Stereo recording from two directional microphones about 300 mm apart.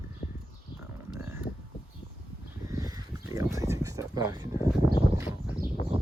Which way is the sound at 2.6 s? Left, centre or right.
Centre.